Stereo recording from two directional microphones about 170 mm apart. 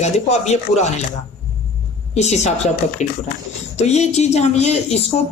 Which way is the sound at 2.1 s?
40° left (ahead or behind).